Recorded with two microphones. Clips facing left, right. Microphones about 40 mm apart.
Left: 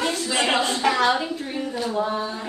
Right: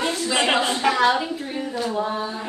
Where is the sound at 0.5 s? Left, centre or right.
Right.